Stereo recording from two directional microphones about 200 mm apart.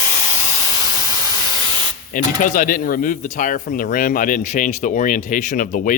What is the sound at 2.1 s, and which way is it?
Speech, 45° left (ahead or behind).